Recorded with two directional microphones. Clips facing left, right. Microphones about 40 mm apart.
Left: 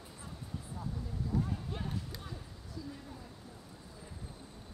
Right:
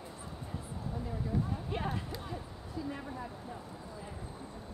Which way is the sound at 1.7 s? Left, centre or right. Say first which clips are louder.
Right 5 dB; right.